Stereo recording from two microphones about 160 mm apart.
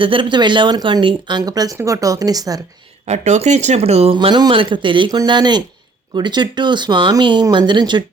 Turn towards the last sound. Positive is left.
turn(degrees=-30)  # may be behind; listen again after turning